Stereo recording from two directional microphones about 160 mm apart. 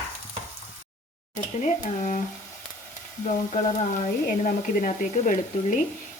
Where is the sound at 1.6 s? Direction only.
50° left (ahead or behind).